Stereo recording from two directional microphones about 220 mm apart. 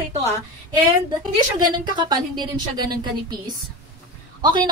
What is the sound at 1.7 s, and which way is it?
A woman's voice, 20° right (ahead or behind).